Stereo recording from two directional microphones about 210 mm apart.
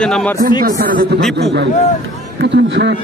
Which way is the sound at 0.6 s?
45° right (ahead or behind).